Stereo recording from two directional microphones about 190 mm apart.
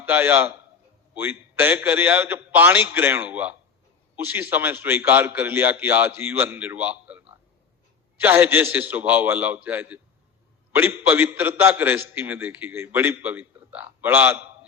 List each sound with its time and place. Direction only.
0.0 s a man's voice: 10° right (ahead or behind)
8.2 s a man's voice: 10° right (ahead or behind)